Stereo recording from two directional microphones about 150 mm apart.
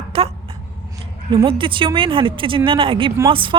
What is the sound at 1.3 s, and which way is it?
Speech, 35° right (ahead or behind).